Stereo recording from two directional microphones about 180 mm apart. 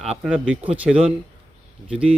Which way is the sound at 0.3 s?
5° right (ahead or behind).